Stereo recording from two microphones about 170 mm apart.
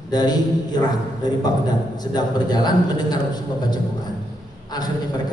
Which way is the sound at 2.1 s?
25° left (ahead or behind).